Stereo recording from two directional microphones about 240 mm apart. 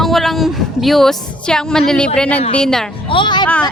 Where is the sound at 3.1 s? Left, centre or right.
Centre.